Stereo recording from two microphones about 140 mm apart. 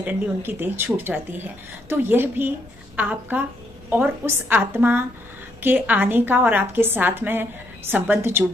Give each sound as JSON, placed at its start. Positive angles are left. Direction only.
{"t": 0.0, "sound": "speech", "side_deg": -15}